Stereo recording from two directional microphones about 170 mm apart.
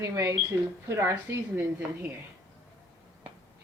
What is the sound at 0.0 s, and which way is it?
A woman's voice, 20° right (ahead or behind).